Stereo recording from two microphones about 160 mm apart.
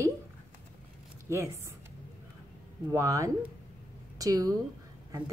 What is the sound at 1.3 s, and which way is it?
Speech, 20° right (ahead or behind).